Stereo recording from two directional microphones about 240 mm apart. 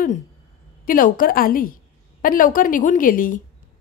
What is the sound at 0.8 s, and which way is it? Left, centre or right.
A woman's voice, left.